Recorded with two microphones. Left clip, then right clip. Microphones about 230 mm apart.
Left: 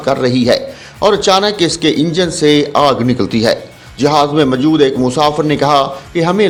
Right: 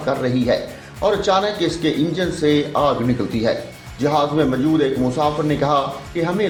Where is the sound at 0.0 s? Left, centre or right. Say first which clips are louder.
Left 7 dB; left.